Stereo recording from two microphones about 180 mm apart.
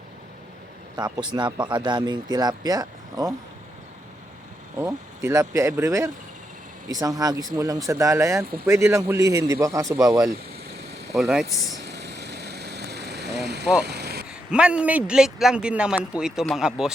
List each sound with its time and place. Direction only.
0.9 s speech: 25° right (ahead or behind)
4.8 s speech: 10° right (ahead or behind)
10.3 s vehicle: 65° right (ahead or behind)
11.1 s a man's voice: centre (ahead or behind)
11.9 s vehicle: 70° right (ahead or behind)
14.5 s a man's voice: 5° right (ahead or behind)